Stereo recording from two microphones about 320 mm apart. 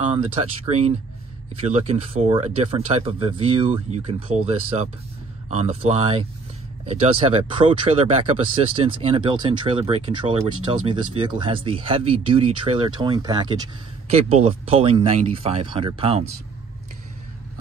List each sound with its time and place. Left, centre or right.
0.1 s speech: centre